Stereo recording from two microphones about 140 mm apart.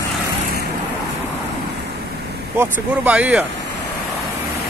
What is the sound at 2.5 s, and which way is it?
Speech, 15° right (ahead or behind).